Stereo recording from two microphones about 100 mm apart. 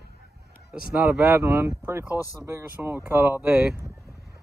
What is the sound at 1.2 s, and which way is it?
Speech, 25° right (ahead or behind).